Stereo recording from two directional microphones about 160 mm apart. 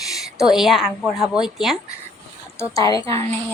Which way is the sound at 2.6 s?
20° left (ahead or behind).